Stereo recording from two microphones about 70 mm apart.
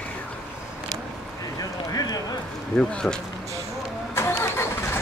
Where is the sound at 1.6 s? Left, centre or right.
Left.